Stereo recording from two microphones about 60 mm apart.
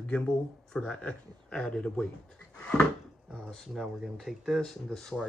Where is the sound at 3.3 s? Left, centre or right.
Centre.